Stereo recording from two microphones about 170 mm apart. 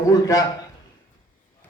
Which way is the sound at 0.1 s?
20° left (ahead or behind).